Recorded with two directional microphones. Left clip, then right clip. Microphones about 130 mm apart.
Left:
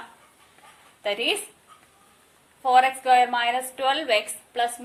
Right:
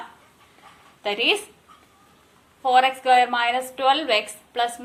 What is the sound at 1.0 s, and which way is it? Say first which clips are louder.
Speech: right 3 dB; 40° left (ahead or behind).